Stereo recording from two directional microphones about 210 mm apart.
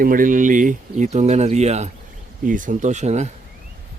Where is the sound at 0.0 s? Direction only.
40° right (ahead or behind).